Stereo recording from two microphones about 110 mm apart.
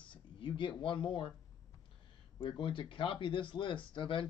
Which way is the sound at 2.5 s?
50° left (ahead or behind).